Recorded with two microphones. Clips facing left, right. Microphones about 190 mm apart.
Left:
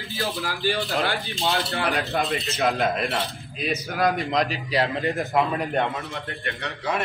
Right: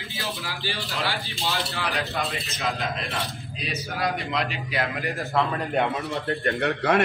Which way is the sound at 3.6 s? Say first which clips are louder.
Left 5 dB; 50° left (ahead or behind).